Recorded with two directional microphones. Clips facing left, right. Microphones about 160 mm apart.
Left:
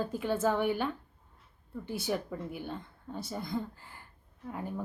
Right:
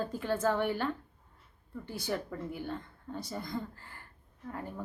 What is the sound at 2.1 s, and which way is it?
A woman's voice, 15° left (ahead or behind).